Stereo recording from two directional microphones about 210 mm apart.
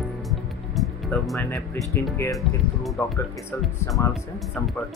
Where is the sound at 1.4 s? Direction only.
10° left (ahead or behind).